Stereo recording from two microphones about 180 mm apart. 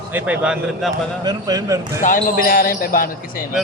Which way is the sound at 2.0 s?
50° left (ahead or behind).